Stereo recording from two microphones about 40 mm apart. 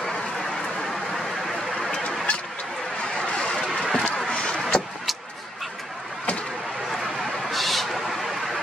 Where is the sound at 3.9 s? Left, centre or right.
Left.